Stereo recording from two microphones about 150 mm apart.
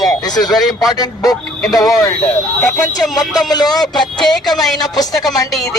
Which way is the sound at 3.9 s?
Centre (ahead or behind).